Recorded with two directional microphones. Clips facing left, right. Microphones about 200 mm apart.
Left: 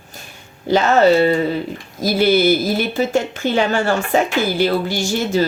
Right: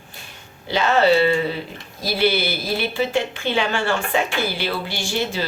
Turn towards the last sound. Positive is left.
turn(degrees=45)  # may be behind; listen again after turning